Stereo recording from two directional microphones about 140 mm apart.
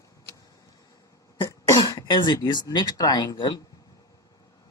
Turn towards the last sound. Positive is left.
turn(degrees=30)  # may be behind; listen again after turning